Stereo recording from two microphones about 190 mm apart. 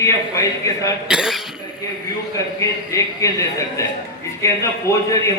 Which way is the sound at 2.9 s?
15° left (ahead or behind).